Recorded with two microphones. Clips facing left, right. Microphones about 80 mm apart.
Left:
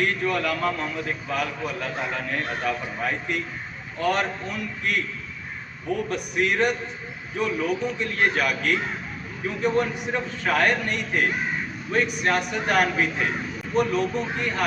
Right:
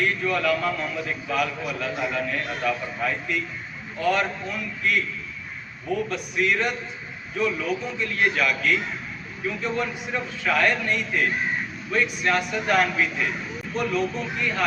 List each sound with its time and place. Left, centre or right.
0.0 s a man's voice: left
6.1 s a man's voice: left
13.7 s speech: left
14.3 s a man's voice: left